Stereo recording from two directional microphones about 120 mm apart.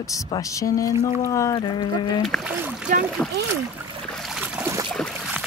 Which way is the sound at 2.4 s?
15° right (ahead or behind).